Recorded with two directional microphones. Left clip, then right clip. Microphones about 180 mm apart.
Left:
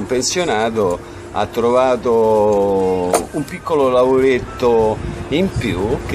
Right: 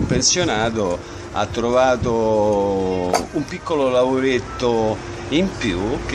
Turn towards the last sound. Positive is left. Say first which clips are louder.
# left 2 dB
turn(degrees=10)  # may be behind; listen again after turning